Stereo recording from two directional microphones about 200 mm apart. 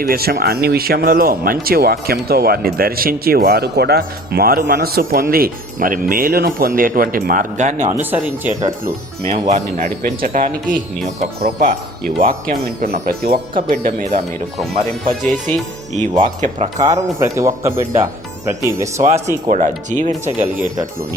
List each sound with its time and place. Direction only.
0.0 s speech: 50° right (ahead or behind)
8.1 s speech: 10° right (ahead or behind)
9.3 s speech: 35° right (ahead or behind)
15.3 s speech: centre (ahead or behind)
16.0 s speech: 35° right (ahead or behind)
17.2 s speech: 15° right (ahead or behind)
19.5 s speech: 35° right (ahead or behind)